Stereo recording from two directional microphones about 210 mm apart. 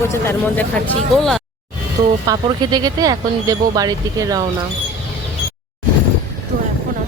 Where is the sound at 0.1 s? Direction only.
10° left (ahead or behind).